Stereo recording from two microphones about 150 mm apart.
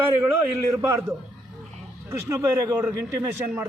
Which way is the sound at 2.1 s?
20° right (ahead or behind).